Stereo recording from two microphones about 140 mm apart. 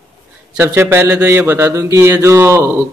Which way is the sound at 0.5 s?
15° right (ahead or behind).